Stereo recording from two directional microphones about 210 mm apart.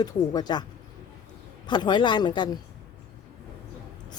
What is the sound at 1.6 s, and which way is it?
Speech, 20° left (ahead or behind).